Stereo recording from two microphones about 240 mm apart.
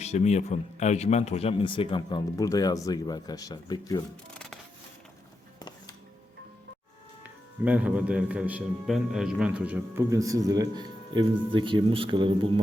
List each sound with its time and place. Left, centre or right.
0.0 s speech: left
5.5 s music: centre
7.6 s a man's voice: centre